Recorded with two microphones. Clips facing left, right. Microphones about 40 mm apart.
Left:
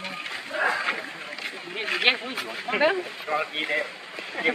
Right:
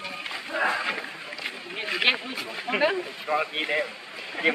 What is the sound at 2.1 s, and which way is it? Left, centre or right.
Speech, centre.